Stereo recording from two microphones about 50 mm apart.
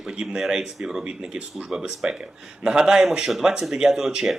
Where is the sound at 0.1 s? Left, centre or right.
Centre.